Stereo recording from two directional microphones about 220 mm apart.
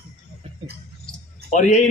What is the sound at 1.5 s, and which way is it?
Speech, 35° left (ahead or behind).